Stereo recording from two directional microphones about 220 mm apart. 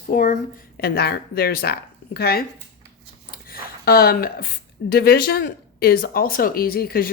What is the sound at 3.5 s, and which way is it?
Speech, 45° left (ahead or behind).